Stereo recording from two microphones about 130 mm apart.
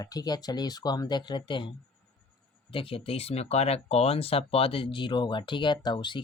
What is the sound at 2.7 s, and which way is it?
Speech, 45° left (ahead or behind).